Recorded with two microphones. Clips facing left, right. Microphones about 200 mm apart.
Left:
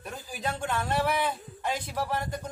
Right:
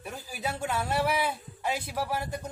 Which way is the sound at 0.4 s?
5° right (ahead or behind).